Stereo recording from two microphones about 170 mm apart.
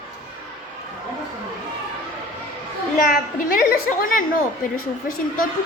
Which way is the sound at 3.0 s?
55° left (ahead or behind).